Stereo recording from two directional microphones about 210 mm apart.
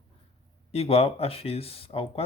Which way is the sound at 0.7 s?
30° left (ahead or behind).